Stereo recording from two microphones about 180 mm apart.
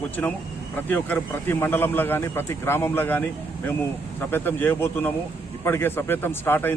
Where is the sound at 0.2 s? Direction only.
5° left (ahead or behind).